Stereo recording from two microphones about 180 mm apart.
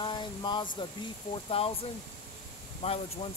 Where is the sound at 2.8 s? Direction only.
35° left (ahead or behind).